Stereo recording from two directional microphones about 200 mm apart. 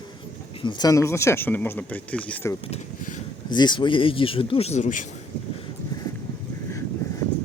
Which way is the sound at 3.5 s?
20° left (ahead or behind).